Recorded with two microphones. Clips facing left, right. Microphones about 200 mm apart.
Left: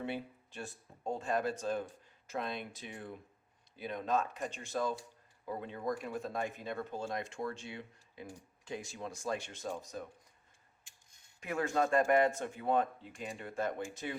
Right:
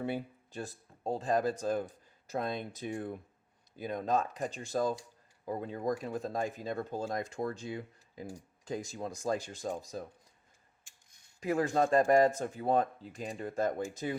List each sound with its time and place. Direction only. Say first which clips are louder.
0.0 s speech: right 4 dB; 40° right (ahead or behind)
11.3 s speech: right 4 dB; 35° right (ahead or behind)